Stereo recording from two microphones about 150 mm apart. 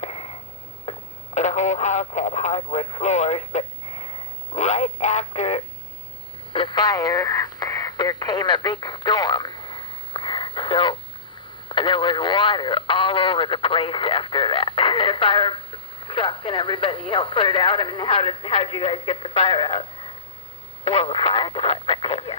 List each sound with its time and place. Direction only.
0.0 s a sound: 45° left (ahead or behind)
0.9 s speech: 50° left (ahead or behind)
6.5 s radio: 35° left (ahead or behind)
11.7 s speech: 35° left (ahead or behind)